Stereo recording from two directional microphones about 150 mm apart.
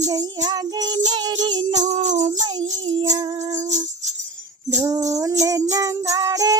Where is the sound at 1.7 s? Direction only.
50° right (ahead or behind).